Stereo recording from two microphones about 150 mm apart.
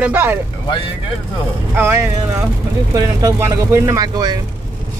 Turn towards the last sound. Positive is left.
turn(degrees=-25)  # may be behind; listen again after turning